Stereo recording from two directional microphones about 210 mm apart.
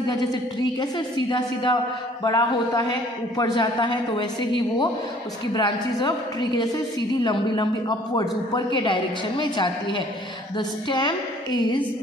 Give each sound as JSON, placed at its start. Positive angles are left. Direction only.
{"t": 1.3, "sound": "a man's voice", "side_deg": 20}
{"t": 8.1, "sound": "a man's voice", "side_deg": 20}